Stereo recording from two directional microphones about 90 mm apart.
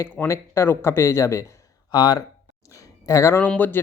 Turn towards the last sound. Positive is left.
turn(degrees=30)  # may be behind; listen again after turning